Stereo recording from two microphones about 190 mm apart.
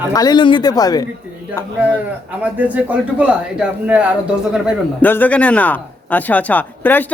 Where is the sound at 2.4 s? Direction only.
5° right (ahead or behind).